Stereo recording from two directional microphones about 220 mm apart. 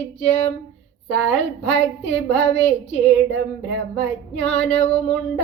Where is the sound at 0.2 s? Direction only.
30° left (ahead or behind).